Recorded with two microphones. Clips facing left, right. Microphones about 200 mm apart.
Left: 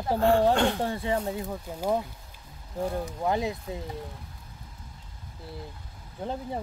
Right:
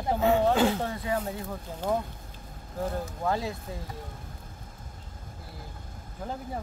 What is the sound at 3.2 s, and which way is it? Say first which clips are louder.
Speech: left 2 dB; 20° left (ahead or behind).